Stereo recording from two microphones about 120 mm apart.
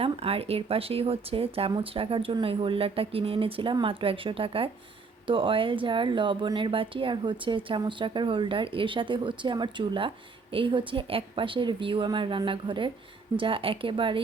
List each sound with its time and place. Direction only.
0.0 s speech: 55° right (ahead or behind)